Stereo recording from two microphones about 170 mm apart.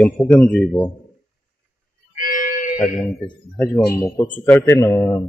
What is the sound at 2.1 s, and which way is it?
Music, 55° left (ahead or behind).